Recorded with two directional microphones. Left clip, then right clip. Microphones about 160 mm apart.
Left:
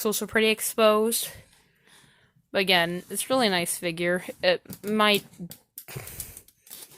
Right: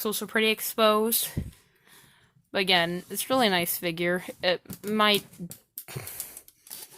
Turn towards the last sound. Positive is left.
turn(degrees=0)  # may be behind; listen again after turning